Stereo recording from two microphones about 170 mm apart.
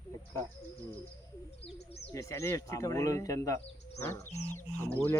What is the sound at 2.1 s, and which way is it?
Speech, 20° left (ahead or behind).